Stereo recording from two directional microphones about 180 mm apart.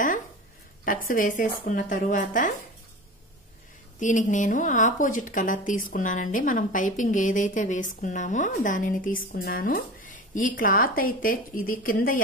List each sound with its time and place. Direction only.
1.0 s a woman's voice: 45° left (ahead or behind)
4.0 s a woman's voice: 45° left (ahead or behind)